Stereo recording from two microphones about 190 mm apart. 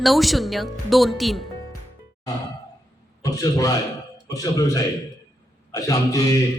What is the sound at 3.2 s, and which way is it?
A man's voice, 20° left (ahead or behind).